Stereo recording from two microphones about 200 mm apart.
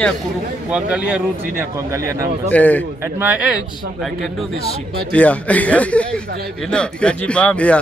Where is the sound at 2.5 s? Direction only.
10° left (ahead or behind).